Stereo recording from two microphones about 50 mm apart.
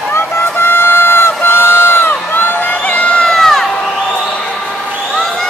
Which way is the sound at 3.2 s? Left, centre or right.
Centre.